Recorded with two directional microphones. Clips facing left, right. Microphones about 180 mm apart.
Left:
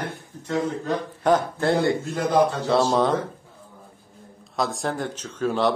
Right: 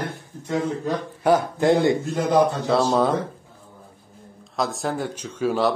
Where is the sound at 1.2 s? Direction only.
10° right (ahead or behind).